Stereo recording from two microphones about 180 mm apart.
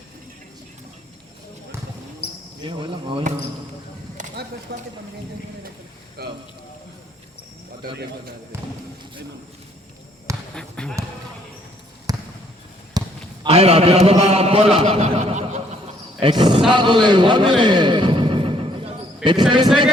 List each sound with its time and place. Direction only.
2.2 s basketball bounce: 65° left (ahead or behind)
2.6 s speech: 25° right (ahead or behind)
4.7 s speech: 70° right (ahead or behind)
6.2 s speech: 60° right (ahead or behind)
8.5 s speech: 15° right (ahead or behind)
10.5 s basketball bounce: 5° left (ahead or behind)
12.1 s basketball bounce: 20° right (ahead or behind)
13.4 s a man's voice: 35° right (ahead or behind)
16.2 s a sound: 25° right (ahead or behind)